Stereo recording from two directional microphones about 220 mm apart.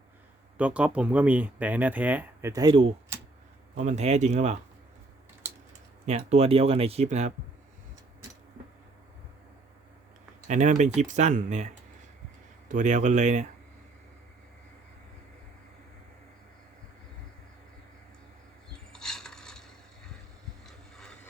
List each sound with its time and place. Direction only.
0.5 s speech: 5° right (ahead or behind); by 4.5 s 30° right (ahead or behind)
6.1 s speech: 30° right (ahead or behind)
10.5 s speech: 35° right (ahead or behind)
18.7 s a sound: 5° left (ahead or behind)